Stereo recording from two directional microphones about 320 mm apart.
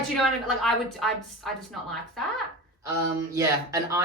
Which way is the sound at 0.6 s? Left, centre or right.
Centre.